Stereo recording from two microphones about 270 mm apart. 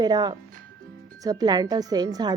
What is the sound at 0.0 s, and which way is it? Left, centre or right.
Speech, centre.